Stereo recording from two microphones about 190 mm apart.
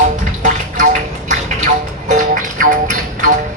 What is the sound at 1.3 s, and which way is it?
Music, 40° right (ahead or behind).